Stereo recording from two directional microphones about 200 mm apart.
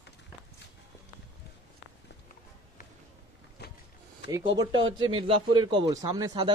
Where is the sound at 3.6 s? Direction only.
55° left (ahead or behind).